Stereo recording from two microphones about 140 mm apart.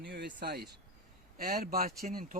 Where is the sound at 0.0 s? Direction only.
85° right.